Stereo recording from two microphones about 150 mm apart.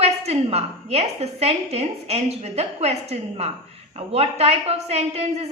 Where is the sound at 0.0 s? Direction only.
45° right (ahead or behind).